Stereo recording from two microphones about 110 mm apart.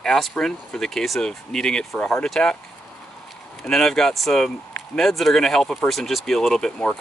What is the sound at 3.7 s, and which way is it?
Speech, 5° left (ahead or behind).